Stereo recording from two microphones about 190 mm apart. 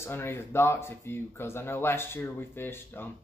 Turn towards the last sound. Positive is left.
turn(degrees=10)  # may be behind; listen again after turning